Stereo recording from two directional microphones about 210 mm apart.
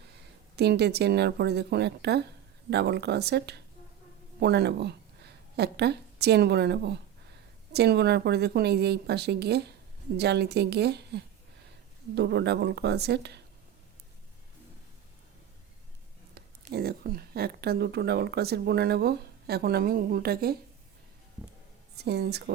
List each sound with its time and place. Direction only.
0.5 s speech: 50° right (ahead or behind)
16.7 s speech: 45° right (ahead or behind)
21.9 s speech: 50° right (ahead or behind)